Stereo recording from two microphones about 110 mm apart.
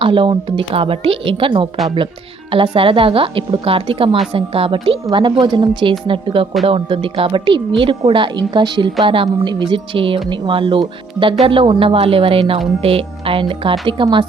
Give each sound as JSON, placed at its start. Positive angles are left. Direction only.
{"t": 0.0, "sound": "a woman's voice", "side_deg": -50}